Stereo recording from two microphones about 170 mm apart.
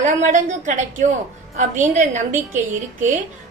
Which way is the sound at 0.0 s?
45° right (ahead or behind).